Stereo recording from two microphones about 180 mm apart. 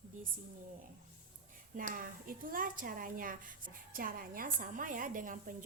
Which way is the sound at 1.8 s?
50° right (ahead or behind).